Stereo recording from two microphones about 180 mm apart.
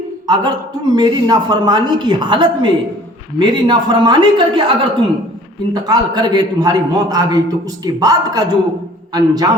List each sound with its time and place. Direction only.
0.9 s a man's voice: 25° right (ahead or behind)